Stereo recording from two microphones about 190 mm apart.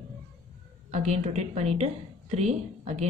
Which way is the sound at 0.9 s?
35° right (ahead or behind).